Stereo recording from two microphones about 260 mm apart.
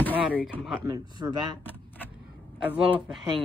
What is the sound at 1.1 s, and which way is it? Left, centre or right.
Speech, centre.